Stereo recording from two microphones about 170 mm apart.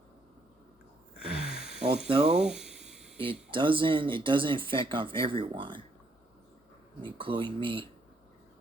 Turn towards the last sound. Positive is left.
turn(degrees=-30)  # may be behind; listen again after turning